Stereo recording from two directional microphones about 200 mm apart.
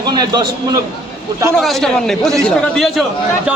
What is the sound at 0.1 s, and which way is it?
Speech, 20° right (ahead or behind).